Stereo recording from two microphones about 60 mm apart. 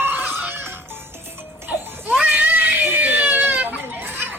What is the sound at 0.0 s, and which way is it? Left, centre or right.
Music, right.